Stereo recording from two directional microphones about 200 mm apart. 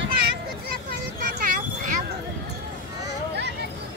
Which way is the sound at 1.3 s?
40° right (ahead or behind).